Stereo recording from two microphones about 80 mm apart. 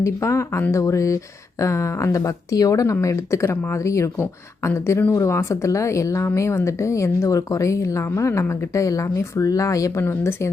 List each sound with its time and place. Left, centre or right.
0.0 s a woman's voice: left